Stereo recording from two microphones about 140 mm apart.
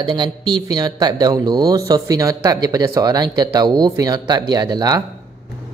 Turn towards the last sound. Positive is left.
turn(degrees=-30)  # may be behind; listen again after turning